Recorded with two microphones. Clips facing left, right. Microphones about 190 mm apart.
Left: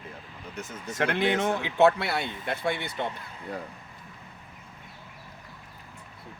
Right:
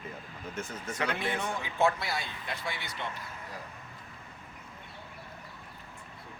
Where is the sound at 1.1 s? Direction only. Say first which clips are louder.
Left 8 dB; 85° left; by 3.1 s 55° left (ahead or behind).